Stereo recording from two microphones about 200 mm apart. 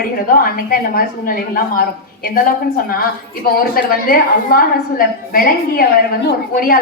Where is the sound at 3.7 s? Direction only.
45° left (ahead or behind).